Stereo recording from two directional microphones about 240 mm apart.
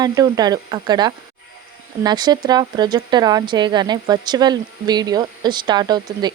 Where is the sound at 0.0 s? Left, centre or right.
Centre.